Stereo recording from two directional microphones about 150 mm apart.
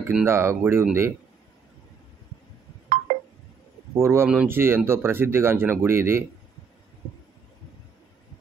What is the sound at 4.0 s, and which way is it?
Speech, 20° right (ahead or behind).